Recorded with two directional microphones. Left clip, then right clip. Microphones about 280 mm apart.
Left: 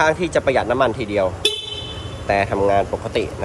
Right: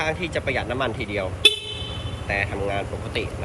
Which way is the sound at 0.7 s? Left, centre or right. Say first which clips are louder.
Left 8 dB; centre.